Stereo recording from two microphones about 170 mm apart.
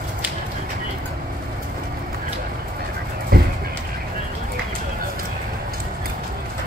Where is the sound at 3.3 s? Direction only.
60° right (ahead or behind).